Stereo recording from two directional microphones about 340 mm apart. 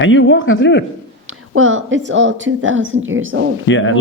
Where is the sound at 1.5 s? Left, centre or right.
Right.